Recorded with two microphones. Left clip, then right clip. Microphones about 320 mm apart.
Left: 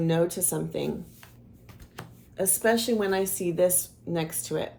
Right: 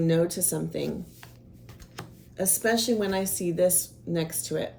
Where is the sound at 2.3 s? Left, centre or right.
Centre.